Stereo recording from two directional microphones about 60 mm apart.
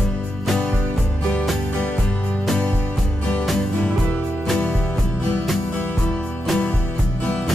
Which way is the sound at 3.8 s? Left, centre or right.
Left.